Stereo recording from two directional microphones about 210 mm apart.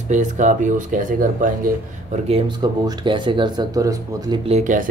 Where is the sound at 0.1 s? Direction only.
35° right (ahead or behind).